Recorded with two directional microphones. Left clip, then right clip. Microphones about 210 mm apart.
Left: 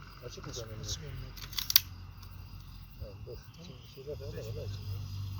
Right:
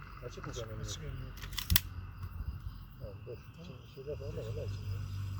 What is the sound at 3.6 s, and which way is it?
Speech, 10° right (ahead or behind).